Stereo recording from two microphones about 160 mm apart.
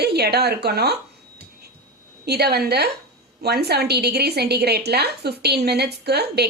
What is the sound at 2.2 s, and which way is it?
A woman's voice, 90° right.